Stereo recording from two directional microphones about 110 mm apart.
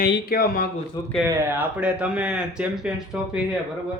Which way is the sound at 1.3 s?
20° right (ahead or behind).